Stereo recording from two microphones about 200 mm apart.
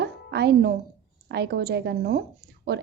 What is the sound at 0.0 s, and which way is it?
Music, 55° right (ahead or behind).